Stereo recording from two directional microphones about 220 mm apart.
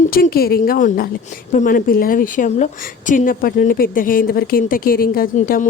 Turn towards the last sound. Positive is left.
turn(degrees=40)  # may be behind; listen again after turning